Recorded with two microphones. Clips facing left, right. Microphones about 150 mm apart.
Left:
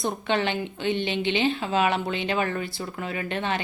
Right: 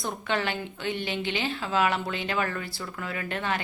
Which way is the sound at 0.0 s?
20° left (ahead or behind).